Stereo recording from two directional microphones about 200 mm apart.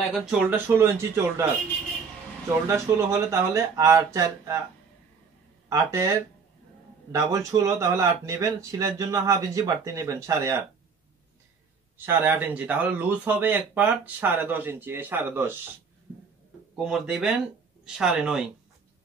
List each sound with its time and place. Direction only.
0.1 s speech: centre (ahead or behind)
2.7 s speech: 15° right (ahead or behind)
5.7 s speech: 15° right (ahead or behind)
12.1 s speech: 10° right (ahead or behind)
16.7 s speech: 5° right (ahead or behind)